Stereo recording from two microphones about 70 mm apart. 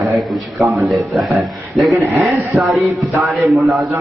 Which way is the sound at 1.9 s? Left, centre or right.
Right.